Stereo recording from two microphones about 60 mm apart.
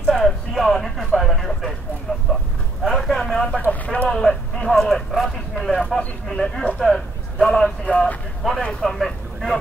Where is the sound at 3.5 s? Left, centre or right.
Left.